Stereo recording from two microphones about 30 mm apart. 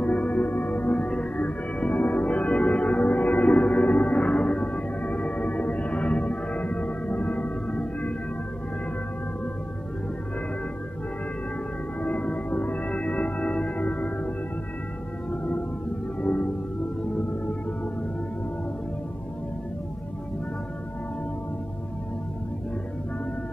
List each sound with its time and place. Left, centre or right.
0.0 s music: left
1.4 s music: left
3.1 s music: left
4.3 s music: left
12.0 s music: left
16.2 s music: left